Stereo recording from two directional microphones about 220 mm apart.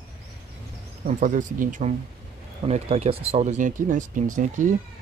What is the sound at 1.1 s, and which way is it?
Speech, 35° right (ahead or behind).